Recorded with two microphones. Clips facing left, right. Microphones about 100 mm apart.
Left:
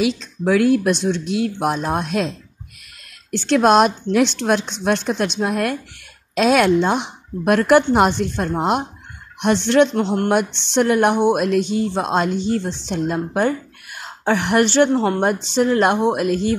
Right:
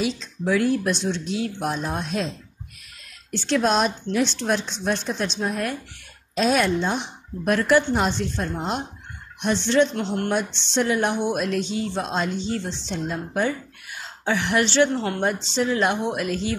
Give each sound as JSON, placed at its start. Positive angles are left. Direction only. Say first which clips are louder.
{"t": 0.0, "sound": "a woman's voice", "louder": "left 6 dB", "side_deg": 65}